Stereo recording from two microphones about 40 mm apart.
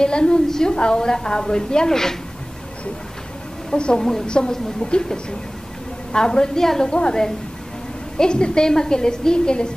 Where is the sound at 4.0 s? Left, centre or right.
Centre.